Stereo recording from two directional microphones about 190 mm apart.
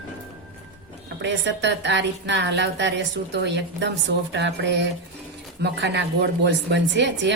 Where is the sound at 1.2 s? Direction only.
70° right (ahead or behind).